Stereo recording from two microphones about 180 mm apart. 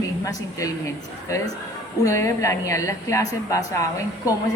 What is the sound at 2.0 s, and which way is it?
A woman's voice, 15° left (ahead or behind).